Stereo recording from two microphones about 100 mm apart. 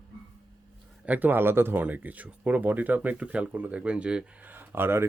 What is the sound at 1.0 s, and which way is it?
Speech, 15° right (ahead or behind).